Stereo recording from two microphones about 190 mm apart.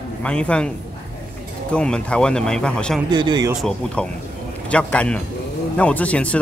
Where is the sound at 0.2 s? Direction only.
5° left (ahead or behind).